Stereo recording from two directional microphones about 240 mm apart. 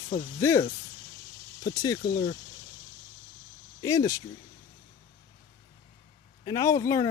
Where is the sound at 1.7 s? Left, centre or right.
Centre.